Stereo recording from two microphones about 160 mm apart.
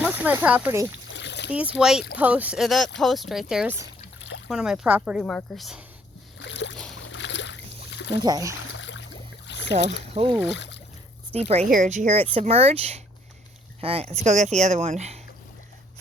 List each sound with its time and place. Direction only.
0.0 s speech: 10° right (ahead or behind)
1.1 s splash: 90° left
1.5 s speech: 10° right (ahead or behind)
5.2 s speech: 5° left (ahead or behind)
7.9 s a sound: 90° left
8.2 s speech: 25° right (ahead or behind)
9.5 s boat: 90° left
10.2 s speech: 45° right (ahead or behind)
10.5 s speech: 90° left
11.3 s speech: 40° right (ahead or behind)